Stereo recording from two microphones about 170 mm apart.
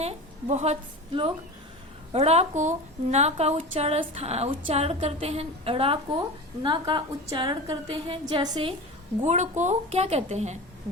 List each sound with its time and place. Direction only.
0.0 s a woman's voice: 40° right (ahead or behind)
9.2 s a woman's voice: 45° right (ahead or behind)